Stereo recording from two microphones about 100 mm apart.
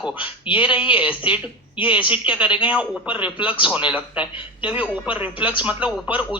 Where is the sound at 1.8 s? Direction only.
55° left (ahead or behind).